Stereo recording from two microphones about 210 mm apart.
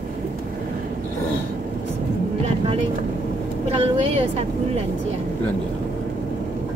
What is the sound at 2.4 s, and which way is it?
Vehicle, 30° right (ahead or behind).